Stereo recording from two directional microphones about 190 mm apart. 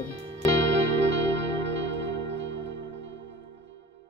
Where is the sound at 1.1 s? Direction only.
70° right (ahead or behind).